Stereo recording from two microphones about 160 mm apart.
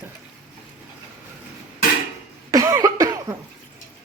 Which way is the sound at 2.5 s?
20° right (ahead or behind).